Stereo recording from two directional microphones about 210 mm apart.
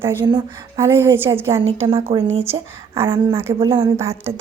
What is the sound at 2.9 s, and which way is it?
Speech, 15° right (ahead or behind).